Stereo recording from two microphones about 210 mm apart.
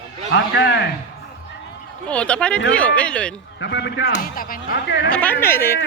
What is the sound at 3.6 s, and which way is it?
Speech, 55° left (ahead or behind).